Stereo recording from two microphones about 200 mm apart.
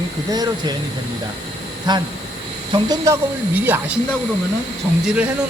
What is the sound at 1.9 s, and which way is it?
Speech, 20° right (ahead or behind).